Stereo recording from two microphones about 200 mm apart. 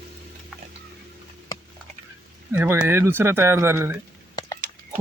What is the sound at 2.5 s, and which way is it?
Speech, 10° right (ahead or behind).